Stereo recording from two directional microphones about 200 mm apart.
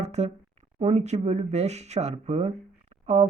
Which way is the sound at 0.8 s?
35° right (ahead or behind).